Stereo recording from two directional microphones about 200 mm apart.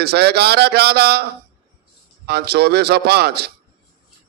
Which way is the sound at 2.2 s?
55° right (ahead or behind).